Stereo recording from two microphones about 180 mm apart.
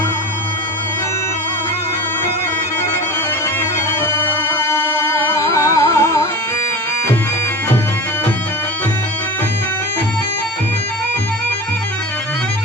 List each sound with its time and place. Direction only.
4.0 s music: 15° left (ahead or behind)